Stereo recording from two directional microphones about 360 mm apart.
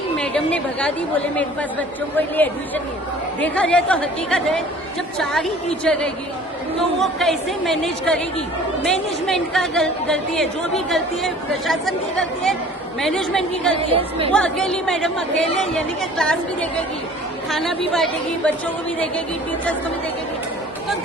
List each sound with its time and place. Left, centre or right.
0.2 s a woman's voice: centre
2.1 s a woman's voice: centre
13.9 s a woman's voice: centre
14.3 s a woman's voice: centre